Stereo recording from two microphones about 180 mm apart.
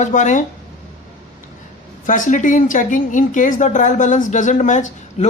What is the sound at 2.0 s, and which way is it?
A woman's voice, 45° left (ahead or behind).